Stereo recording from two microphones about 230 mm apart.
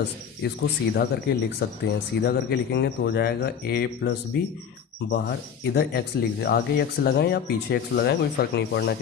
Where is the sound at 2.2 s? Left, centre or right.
Left.